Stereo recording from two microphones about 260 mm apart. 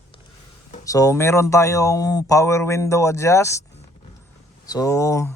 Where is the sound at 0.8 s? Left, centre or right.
Centre.